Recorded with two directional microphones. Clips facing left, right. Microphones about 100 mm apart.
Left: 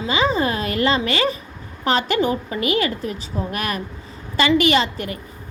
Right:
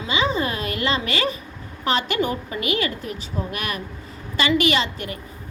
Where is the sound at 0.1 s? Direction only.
35° left (ahead or behind).